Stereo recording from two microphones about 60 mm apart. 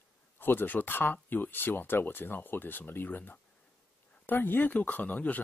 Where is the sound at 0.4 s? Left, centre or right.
Left.